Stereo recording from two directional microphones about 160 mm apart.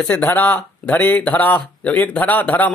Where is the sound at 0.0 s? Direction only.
10° left (ahead or behind).